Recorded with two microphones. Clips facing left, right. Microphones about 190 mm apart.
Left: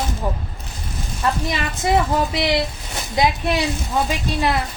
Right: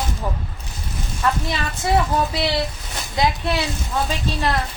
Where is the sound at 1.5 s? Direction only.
15° left (ahead or behind).